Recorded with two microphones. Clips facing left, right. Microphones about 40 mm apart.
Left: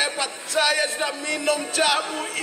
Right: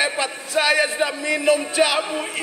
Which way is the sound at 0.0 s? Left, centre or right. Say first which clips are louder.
Right 3 dB; centre.